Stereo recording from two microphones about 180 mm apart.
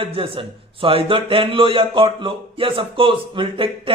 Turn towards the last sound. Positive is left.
turn(degrees=-30)  # may be behind; listen again after turning